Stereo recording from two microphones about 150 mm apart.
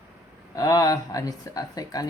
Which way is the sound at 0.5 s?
25° left (ahead or behind).